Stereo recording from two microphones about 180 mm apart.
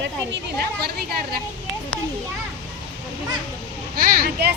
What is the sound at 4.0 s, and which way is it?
Speech, 55° right (ahead or behind).